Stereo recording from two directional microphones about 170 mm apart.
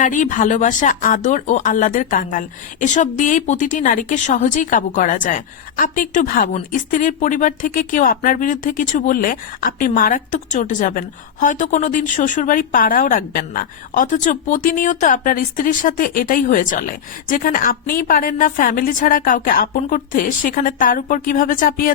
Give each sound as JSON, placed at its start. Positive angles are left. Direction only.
{"t": 0.0, "sound": "speech", "side_deg": 50}